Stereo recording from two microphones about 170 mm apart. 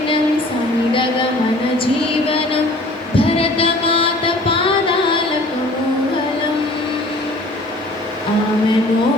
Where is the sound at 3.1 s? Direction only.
35° left (ahead or behind).